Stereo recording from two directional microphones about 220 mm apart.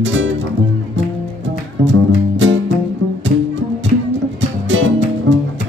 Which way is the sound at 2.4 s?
55° right (ahead or behind).